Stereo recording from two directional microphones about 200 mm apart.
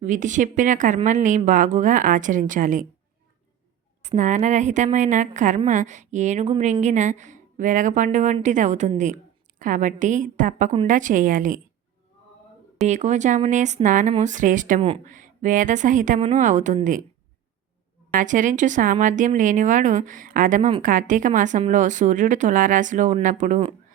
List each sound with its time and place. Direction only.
0.0 s speech: 40° right (ahead or behind)
4.0 s speech: 35° right (ahead or behind)
12.9 s speech: 35° right (ahead or behind)
18.1 s speech: 40° right (ahead or behind)